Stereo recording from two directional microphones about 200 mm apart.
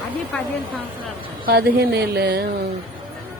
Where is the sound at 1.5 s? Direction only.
55° right (ahead or behind).